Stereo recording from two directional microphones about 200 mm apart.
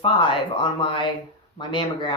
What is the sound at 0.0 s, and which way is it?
Speech, 25° left (ahead or behind).